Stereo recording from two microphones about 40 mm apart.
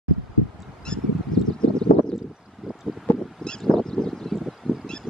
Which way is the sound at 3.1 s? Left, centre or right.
Left.